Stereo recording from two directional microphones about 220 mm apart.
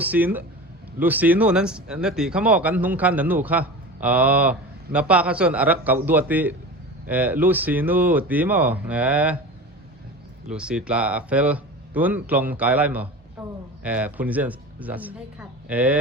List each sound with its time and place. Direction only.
0.0 s speech: 5° right (ahead or behind)
10.5 s a man's voice: 5° right (ahead or behind)